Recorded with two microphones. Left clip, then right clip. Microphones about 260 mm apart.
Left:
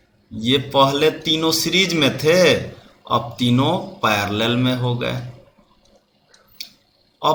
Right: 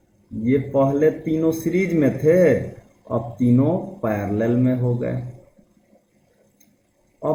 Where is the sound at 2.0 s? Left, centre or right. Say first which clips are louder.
Even; left.